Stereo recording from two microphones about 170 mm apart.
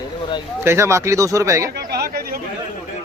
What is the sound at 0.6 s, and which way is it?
Speech, 15° right (ahead or behind).